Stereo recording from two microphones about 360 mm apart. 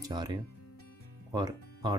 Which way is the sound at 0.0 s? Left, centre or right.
Centre.